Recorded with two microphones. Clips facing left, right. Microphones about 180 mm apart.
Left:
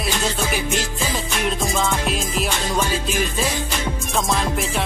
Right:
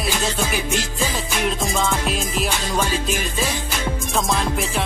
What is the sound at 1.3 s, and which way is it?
Speech, centre (ahead or behind).